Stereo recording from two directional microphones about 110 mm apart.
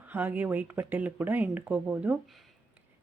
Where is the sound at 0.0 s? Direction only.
15° right (ahead or behind).